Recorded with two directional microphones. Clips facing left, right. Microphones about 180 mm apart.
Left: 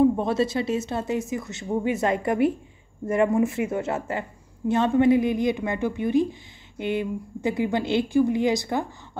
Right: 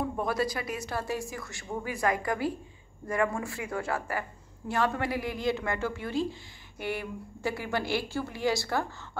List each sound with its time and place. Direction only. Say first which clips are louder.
0.0 s a woman's voice: left 9 dB; 25° left (ahead or behind)